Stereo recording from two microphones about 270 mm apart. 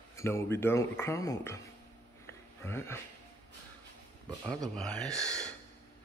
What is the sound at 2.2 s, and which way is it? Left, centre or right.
Sniff, centre.